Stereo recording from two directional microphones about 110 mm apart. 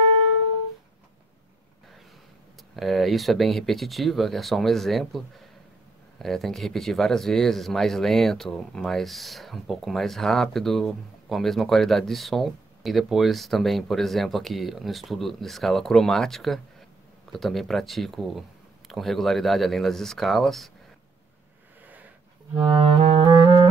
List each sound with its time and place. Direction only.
2.7 s speech: centre (ahead or behind)
21.8 s a sound: 15° right (ahead or behind)
22.7 s clarinet: 50° right (ahead or behind)
23.2 s music: 35° right (ahead or behind)